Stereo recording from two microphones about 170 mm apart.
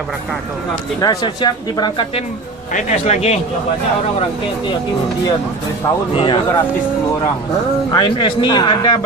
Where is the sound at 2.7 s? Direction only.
40° left (ahead or behind).